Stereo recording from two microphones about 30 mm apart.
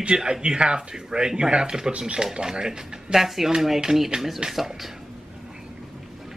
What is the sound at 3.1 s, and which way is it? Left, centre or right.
Speech, centre.